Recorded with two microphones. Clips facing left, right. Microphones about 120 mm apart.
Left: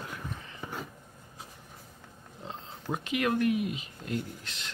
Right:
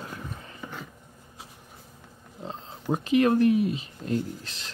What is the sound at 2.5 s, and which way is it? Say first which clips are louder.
Speech: right 6 dB; 35° right (ahead or behind).